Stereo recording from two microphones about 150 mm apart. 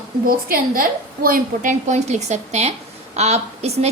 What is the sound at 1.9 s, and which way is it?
A woman's voice, 50° right (ahead or behind).